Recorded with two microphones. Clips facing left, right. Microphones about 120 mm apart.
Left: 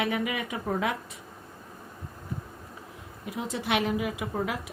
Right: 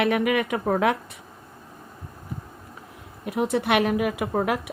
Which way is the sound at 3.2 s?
65° right (ahead or behind).